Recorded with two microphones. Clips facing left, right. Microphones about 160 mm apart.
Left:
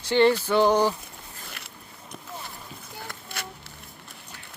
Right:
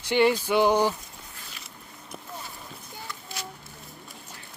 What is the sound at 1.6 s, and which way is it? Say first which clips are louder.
Biting: left 2 dB; 65° left (ahead or behind).